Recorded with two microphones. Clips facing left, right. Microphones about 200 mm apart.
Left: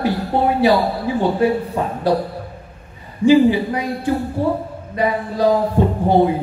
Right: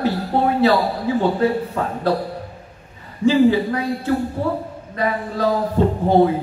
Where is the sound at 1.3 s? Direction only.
15° left (ahead or behind).